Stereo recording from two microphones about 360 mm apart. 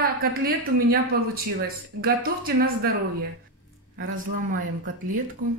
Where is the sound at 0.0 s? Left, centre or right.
Right.